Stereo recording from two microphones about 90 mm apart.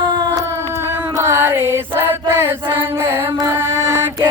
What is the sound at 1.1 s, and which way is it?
Chant, 30° right (ahead or behind).